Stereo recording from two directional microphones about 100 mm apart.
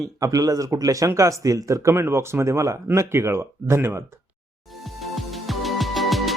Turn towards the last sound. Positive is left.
turn(degrees=0)  # may be behind; listen again after turning